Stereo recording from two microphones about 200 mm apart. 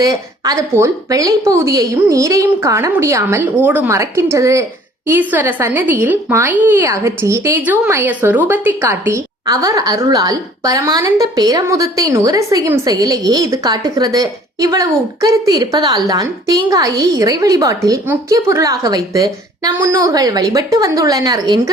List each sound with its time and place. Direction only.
0.0 s a woman's voice: 15° right (ahead or behind)